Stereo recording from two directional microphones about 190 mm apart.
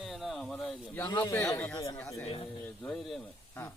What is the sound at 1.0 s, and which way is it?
Speech, 20° left (ahead or behind).